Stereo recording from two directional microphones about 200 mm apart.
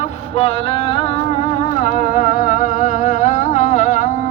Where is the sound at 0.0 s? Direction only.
30° left (ahead or behind).